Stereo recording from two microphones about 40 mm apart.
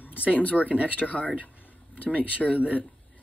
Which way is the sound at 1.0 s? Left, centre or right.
Left.